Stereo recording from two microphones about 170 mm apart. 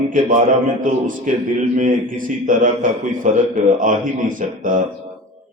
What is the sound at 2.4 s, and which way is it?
Mantra, 50° right (ahead or behind).